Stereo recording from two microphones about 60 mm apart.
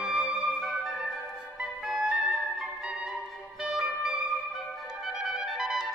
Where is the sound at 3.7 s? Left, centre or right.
Centre.